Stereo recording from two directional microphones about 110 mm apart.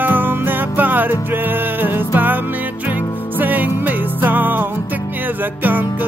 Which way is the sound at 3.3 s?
15° right (ahead or behind).